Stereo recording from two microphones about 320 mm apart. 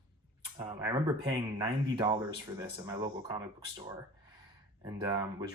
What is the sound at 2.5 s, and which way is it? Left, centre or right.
Speech, centre.